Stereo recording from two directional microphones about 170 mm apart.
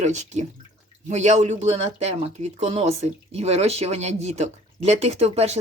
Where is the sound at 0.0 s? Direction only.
45° right (ahead or behind).